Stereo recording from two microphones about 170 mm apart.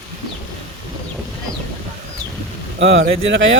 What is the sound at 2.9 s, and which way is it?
Speech, 90° right.